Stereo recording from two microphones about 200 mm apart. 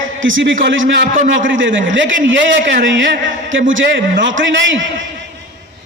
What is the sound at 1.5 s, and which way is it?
A man's voice, 70° right (ahead or behind).